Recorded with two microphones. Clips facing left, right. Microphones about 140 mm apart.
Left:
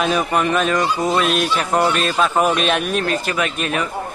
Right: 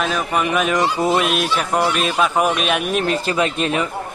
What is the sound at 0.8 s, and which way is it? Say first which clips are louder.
Speech: right 1 dB; 20° right (ahead or behind).